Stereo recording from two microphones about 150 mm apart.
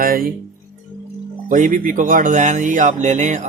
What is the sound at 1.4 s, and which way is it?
Speech, 60° right (ahead or behind).